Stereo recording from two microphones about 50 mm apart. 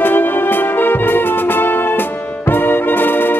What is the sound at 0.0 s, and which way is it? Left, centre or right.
Music, left.